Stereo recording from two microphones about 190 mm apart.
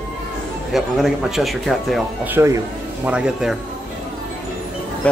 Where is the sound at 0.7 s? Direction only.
Centre (ahead or behind).